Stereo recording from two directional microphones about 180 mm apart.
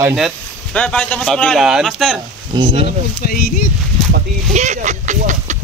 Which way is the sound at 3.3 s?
55° left (ahead or behind).